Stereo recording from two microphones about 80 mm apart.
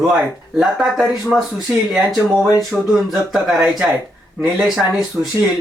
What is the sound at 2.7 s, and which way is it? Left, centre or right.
Speech, centre.